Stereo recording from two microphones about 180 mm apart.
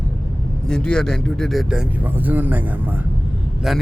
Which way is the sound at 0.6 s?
5° left (ahead or behind).